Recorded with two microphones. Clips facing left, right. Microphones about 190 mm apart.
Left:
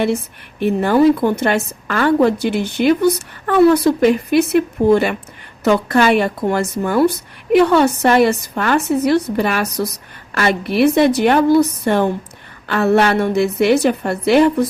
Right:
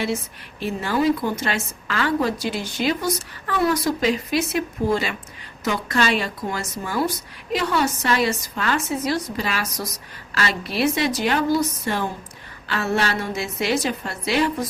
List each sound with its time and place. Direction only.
0.6 s a woman's voice: 60° left (ahead or behind)